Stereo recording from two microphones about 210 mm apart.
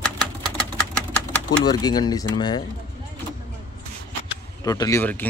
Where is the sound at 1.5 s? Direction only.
20° left (ahead or behind).